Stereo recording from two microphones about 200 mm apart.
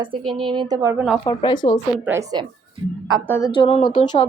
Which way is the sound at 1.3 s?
20° left (ahead or behind).